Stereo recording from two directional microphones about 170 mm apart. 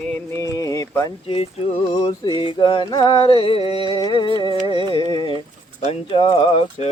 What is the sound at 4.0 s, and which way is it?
Music, 25° left (ahead or behind).